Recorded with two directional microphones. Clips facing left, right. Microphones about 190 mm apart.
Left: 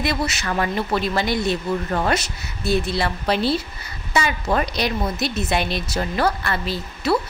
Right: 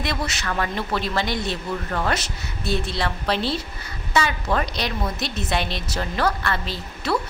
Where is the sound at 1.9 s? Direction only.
25° left (ahead or behind).